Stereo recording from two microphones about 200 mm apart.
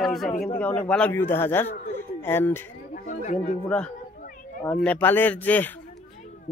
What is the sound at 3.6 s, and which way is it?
Speech, 5° left (ahead or behind).